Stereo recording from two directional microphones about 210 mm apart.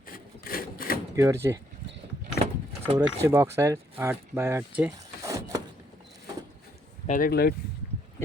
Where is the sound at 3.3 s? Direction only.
10° right (ahead or behind).